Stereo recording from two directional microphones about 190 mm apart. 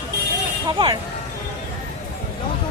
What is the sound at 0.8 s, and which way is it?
Speech, 30° right (ahead or behind).